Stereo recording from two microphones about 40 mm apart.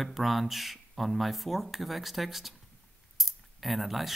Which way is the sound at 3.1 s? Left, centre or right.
Centre.